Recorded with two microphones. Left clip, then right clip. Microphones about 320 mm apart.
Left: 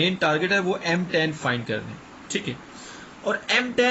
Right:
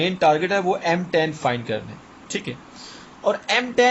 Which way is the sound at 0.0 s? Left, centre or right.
Centre.